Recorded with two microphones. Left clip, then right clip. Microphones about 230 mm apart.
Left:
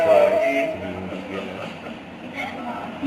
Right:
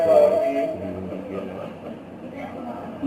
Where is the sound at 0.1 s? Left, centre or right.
Left.